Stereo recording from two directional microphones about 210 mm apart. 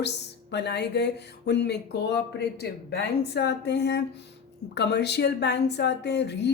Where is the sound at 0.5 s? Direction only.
55° left (ahead or behind).